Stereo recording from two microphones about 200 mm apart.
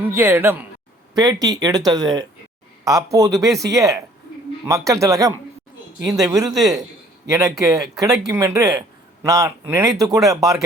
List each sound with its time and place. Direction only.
0.0 s speech: 15° right (ahead or behind)